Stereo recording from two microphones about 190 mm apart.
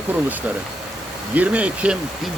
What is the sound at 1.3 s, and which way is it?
Speech, 10° right (ahead or behind).